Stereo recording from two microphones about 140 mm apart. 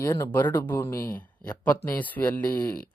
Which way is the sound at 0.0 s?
20° left (ahead or behind).